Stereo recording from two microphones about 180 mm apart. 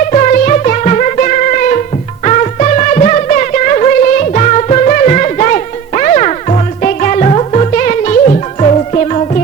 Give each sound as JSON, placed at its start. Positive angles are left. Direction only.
{"t": 0.1, "sound": "music", "side_deg": 40}